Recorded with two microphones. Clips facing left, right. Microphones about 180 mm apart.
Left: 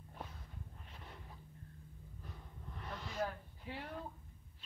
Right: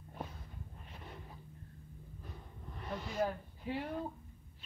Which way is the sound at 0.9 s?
10° right (ahead or behind).